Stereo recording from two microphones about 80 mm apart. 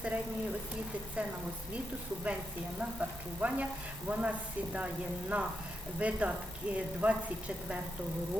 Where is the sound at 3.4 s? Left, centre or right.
Right.